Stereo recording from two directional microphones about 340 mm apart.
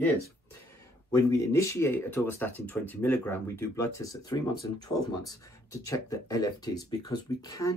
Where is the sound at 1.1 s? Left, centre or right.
Centre.